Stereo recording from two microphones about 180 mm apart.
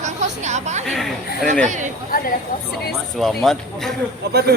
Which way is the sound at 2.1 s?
55° left (ahead or behind).